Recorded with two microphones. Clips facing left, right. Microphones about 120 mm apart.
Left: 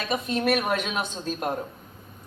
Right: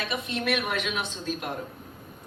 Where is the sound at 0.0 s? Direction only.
40° left (ahead or behind).